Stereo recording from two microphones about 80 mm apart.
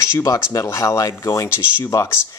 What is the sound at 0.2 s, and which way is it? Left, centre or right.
Speech, left.